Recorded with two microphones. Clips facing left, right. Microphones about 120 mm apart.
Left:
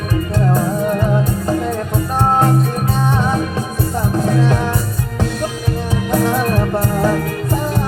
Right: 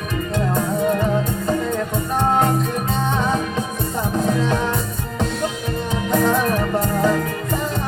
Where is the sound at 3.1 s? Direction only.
20° right (ahead or behind).